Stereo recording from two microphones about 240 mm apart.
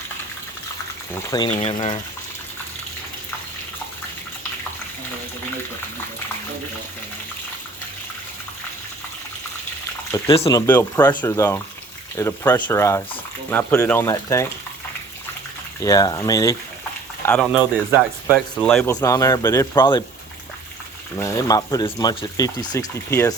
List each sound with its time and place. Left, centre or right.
1.5 s speech: left
10.1 s speech: left
10.7 s speech: centre
15.8 s speech: centre
17.6 s speech: centre
18.6 s speech: centre
21.2 s speech: centre